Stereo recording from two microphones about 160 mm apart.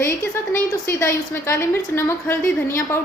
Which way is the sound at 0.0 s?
15° left (ahead or behind).